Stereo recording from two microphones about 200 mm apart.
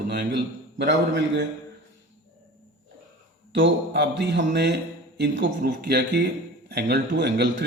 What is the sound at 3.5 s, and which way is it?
A man's voice, 60° right (ahead or behind).